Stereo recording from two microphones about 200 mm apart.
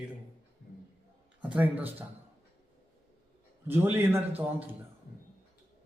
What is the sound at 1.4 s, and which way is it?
Speech, 5° right (ahead or behind).